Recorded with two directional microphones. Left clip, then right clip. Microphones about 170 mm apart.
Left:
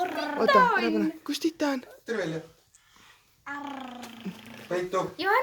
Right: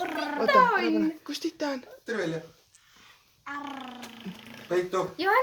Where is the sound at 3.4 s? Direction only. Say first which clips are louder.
Even; 50° left (ahead or behind).